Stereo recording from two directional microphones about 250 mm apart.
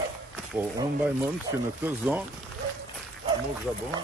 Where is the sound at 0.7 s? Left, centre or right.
Centre.